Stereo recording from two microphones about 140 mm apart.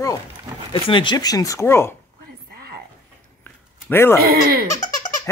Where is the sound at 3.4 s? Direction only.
15° left (ahead or behind).